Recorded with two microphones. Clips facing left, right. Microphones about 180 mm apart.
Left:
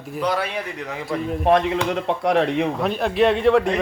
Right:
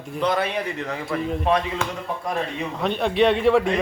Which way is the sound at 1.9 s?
75° left (ahead or behind).